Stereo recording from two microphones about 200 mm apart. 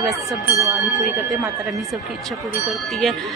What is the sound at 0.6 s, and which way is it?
Speech, 15° right (ahead or behind).